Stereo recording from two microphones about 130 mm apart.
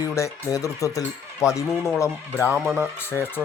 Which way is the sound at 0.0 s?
25° left (ahead or behind).